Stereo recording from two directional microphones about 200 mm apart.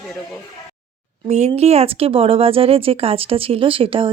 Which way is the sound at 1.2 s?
35° right (ahead or behind).